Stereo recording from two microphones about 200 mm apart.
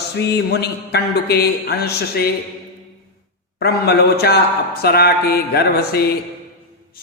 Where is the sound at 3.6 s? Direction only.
55° left (ahead or behind).